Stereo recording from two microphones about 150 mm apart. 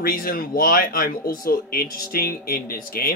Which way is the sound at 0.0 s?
75° left (ahead or behind).